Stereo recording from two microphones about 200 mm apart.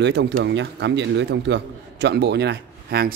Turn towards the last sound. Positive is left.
turn(degrees=-55)  # may be behind; listen again after turning